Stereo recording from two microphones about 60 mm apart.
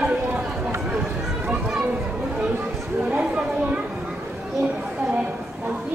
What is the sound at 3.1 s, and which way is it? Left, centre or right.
Speech, right.